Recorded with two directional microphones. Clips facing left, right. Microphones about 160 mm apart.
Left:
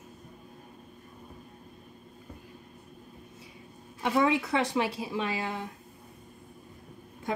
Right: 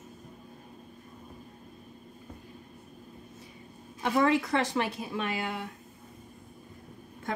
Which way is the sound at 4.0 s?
10° left (ahead or behind).